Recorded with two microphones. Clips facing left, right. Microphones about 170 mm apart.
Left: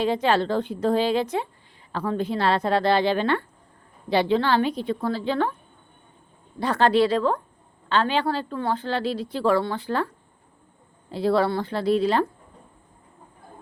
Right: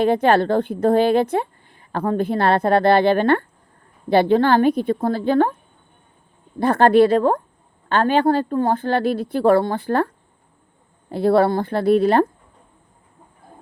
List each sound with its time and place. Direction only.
0.0 s a woman's voice: 55° right (ahead or behind)
6.6 s speech: 50° right (ahead or behind)
11.1 s a woman's voice: 55° right (ahead or behind)